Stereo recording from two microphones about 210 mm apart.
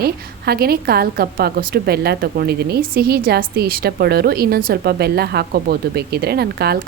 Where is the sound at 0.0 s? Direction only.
50° right (ahead or behind).